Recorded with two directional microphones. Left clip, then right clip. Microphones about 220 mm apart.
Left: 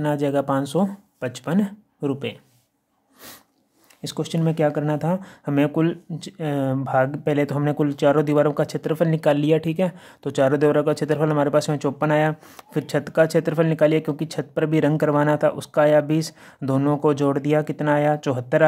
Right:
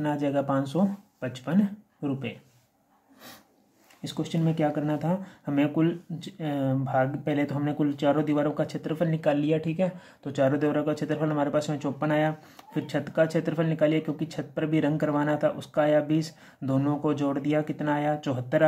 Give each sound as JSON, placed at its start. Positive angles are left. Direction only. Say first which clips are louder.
{"t": 0.0, "sound": "speech", "louder": "left 5 dB", "side_deg": 50}
{"t": 4.0, "sound": "speech", "louder": "left 5 dB", "side_deg": 50}